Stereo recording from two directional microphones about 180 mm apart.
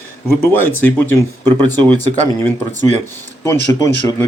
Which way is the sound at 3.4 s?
15° left (ahead or behind).